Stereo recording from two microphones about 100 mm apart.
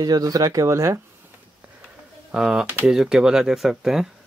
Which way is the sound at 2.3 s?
5° right (ahead or behind).